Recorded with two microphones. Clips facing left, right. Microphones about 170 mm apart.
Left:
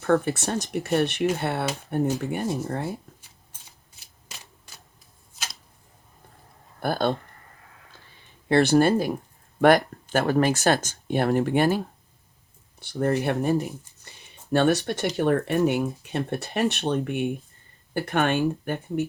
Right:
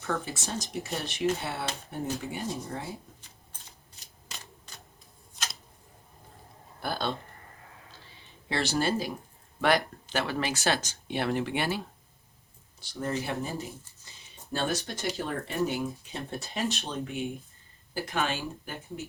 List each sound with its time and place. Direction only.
0.0 s speech: 60° left (ahead or behind)
5.4 s a sound: centre (ahead or behind)
6.7 s speech: 50° left (ahead or behind)
8.4 s speech: 55° left (ahead or behind)
12.8 s speech: 60° left (ahead or behind)